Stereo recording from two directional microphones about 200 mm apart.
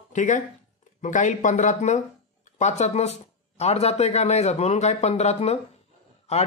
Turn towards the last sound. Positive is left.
turn(degrees=30)  # may be behind; listen again after turning